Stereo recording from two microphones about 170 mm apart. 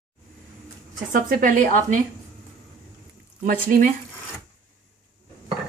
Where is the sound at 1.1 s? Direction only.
55° right (ahead or behind).